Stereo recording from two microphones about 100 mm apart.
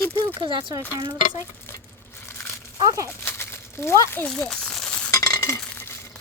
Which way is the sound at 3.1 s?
25° left (ahead or behind).